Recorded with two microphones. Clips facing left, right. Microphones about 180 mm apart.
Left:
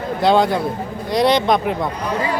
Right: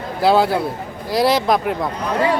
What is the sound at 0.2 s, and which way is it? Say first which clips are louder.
Speech: even; 5° right (ahead or behind).